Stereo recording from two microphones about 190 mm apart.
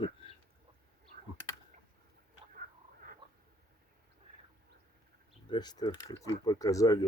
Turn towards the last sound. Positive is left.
turn(degrees=20)  # may be behind; listen again after turning